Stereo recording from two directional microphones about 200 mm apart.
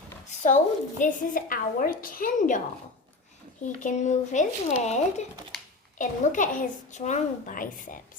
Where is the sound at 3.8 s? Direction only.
35° left (ahead or behind).